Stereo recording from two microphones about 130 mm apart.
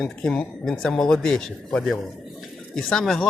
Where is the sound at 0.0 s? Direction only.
5° left (ahead or behind).